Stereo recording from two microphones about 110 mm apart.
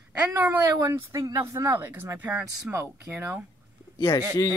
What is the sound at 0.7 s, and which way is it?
Speech, 30° right (ahead or behind).